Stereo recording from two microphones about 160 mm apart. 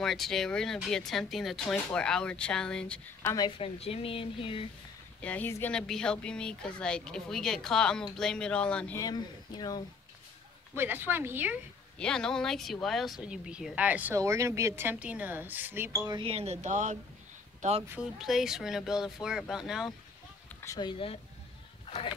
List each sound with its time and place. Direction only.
0.0 s speech: centre (ahead or behind)
3.2 s a woman's voice: 15° left (ahead or behind)
3.4 s speech: 35° left (ahead or behind)
5.2 s speech: 10° left (ahead or behind)
8.9 s speech: 25° left (ahead or behind)
10.8 s speech: 10° right (ahead or behind)
12.0 s speech: 5° left (ahead or behind); by 15.9 s 10° right (ahead or behind)
16.2 s speech: 40° right (ahead or behind)
18.2 s speech: centre (ahead or behind)
20.6 s speech: 25° left (ahead or behind)